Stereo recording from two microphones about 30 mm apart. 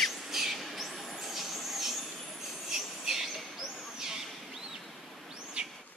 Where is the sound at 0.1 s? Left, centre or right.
Centre; by 5.7 s right.